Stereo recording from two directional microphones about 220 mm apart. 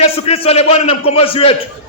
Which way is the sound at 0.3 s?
30° left (ahead or behind).